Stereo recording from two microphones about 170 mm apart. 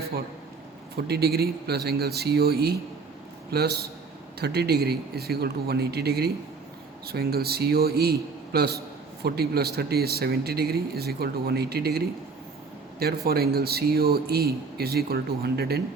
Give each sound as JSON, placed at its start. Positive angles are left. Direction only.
{"t": 0.9, "sound": "speech", "side_deg": -70}
{"t": 13.2, "sound": "speech", "side_deg": -65}